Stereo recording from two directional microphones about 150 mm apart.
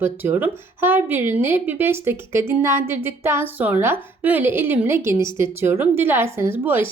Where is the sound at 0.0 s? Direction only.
15° right (ahead or behind).